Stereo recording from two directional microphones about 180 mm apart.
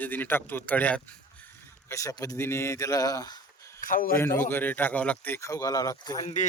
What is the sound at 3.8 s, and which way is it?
Speech, 50° left (ahead or behind).